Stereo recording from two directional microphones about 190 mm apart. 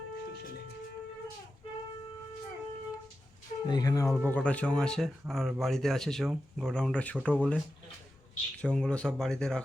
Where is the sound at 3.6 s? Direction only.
20° left (ahead or behind).